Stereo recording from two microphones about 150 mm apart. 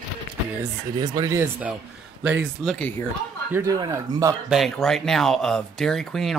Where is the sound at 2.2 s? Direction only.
10° right (ahead or behind).